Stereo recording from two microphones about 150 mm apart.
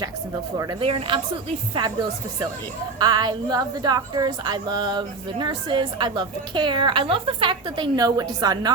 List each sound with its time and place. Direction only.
0.5 s speech: 30° right (ahead or behind)
3.0 s a woman's voice: 30° right (ahead or behind)